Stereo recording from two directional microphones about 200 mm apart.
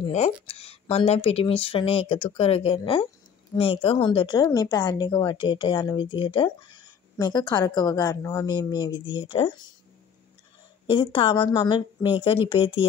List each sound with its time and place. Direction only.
0.0 s speech: 30° left (ahead or behind)
10.9 s speech: 25° left (ahead or behind)